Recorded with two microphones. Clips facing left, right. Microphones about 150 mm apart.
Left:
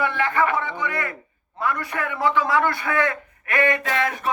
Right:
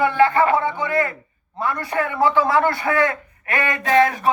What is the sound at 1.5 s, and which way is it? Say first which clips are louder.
A man's voice: right 3 dB; 30° right (ahead or behind).